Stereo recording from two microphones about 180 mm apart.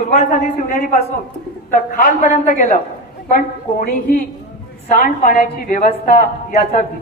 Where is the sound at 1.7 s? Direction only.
50° left (ahead or behind).